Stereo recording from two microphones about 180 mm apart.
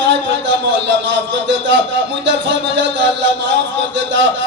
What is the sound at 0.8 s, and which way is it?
A man's voice, 80° right.